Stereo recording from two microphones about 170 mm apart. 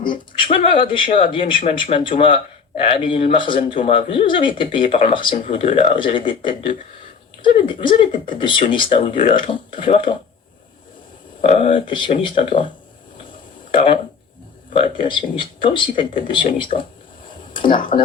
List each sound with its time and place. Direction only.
0.1 s speech: 30° left (ahead or behind)
11.3 s speech: 35° left (ahead or behind)
13.7 s speech: 30° left (ahead or behind)
17.5 s a sound: 30° left (ahead or behind)